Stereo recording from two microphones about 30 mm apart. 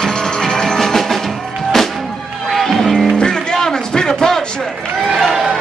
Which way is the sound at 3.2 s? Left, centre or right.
Left.